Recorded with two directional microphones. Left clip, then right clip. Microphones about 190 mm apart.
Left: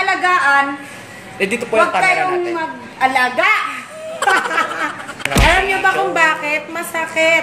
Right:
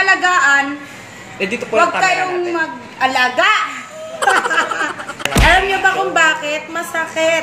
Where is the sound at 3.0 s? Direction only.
15° right (ahead or behind).